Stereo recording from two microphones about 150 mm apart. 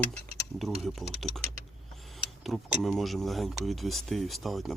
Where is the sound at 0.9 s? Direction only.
Centre (ahead or behind).